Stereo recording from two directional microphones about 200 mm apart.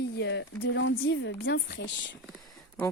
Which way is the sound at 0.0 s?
60° left (ahead or behind).